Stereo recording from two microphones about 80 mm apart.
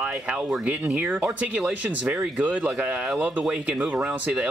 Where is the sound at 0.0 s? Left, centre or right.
Centre.